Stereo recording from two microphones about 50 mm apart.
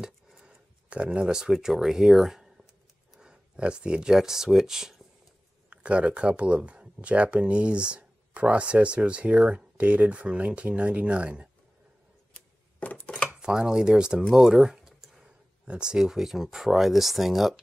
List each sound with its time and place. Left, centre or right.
0.0 s a sound: centre
0.8 s speech: right; by 2.7 s centre
3.2 s speech: centre
5.7 s speech: right
13.0 s dishes: left
13.3 s speech: centre
14.3 s a sound: centre
15.6 s speech: centre